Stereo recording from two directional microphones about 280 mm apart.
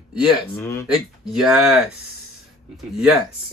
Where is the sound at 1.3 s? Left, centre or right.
Centre.